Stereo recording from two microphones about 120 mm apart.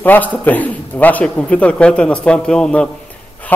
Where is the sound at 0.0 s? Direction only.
15° left (ahead or behind).